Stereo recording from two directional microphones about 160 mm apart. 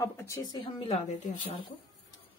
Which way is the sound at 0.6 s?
35° left (ahead or behind).